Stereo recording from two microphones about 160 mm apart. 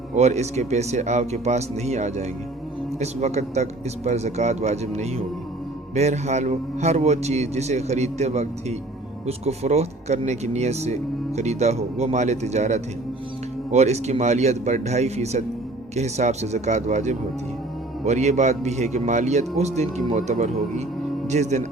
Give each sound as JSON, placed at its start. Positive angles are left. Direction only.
{"t": 0.2, "sound": "a man's voice", "side_deg": -45}
{"t": 20.1, "sound": "a man's voice", "side_deg": -55}